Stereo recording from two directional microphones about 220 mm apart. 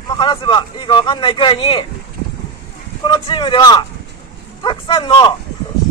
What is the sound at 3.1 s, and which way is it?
Speech, 20° left (ahead or behind).